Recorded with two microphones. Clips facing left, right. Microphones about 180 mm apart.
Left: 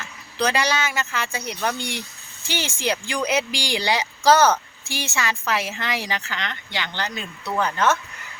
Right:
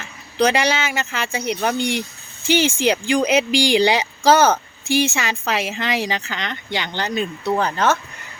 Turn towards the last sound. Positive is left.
turn(degrees=-35)  # may be behind; listen again after turning